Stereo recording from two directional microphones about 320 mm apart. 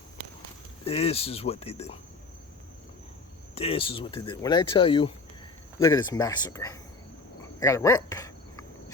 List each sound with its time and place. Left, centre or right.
0.9 s speech: centre
3.5 s speech: centre
7.6 s a sound: centre